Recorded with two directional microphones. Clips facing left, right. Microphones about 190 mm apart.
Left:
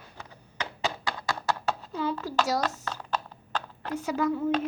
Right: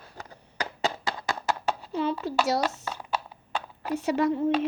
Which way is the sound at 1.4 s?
15° right (ahead or behind).